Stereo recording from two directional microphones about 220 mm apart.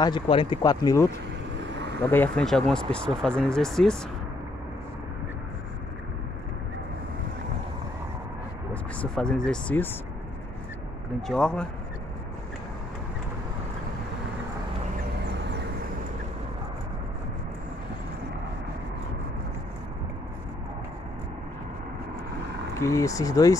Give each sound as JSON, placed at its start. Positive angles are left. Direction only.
{"t": 0.0, "sound": "speech", "side_deg": 20}
{"t": 9.0, "sound": "speech", "side_deg": 5}
{"t": 11.2, "sound": "speech", "side_deg": 5}
{"t": 22.8, "sound": "speech", "side_deg": 15}